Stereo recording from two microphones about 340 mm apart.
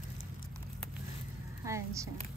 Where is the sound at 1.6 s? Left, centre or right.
Centre.